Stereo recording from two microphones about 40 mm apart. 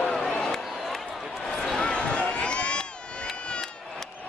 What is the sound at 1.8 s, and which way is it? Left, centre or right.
Run, left.